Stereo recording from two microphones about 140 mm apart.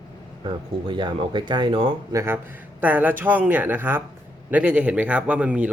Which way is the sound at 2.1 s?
15° right (ahead or behind).